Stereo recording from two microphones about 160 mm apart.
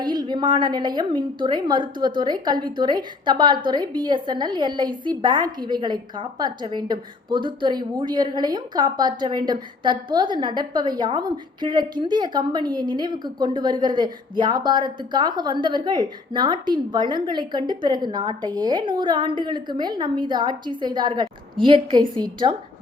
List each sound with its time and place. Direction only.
0.0 s a woman's voice: 25° right (ahead or behind)